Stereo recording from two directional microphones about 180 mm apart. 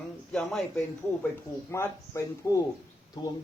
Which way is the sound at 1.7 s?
15° left (ahead or behind).